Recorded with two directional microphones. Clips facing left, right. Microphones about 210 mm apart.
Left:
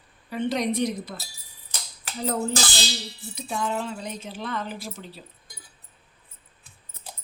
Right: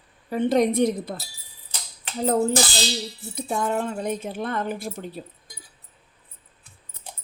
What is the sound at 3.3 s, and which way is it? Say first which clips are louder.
Speech: right 4 dB; 50° right (ahead or behind).